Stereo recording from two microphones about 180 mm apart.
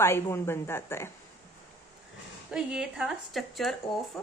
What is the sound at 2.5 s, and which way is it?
A woman's voice, 5° right (ahead or behind).